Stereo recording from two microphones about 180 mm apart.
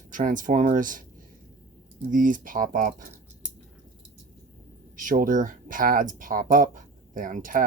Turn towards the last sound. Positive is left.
turn(degrees=-50)  # may be behind; listen again after turning